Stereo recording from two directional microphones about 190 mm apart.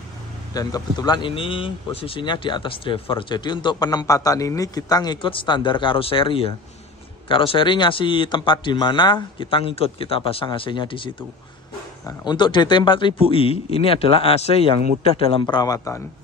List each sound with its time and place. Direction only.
0.6 s speech: 20° left (ahead or behind)
15.4 s speech: 20° left (ahead or behind)